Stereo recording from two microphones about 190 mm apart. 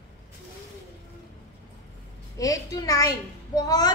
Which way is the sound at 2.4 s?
20° left (ahead or behind).